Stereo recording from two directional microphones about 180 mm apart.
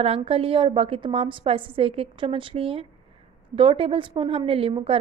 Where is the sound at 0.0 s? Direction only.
30° right (ahead or behind).